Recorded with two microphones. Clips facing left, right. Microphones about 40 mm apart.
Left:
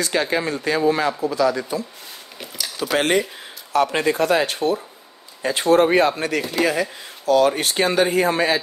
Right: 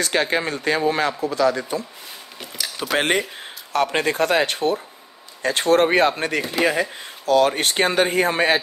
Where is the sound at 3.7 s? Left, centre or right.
Right.